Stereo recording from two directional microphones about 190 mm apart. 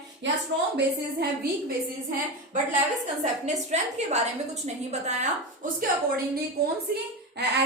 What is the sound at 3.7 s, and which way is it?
A woman's voice, 35° right (ahead or behind).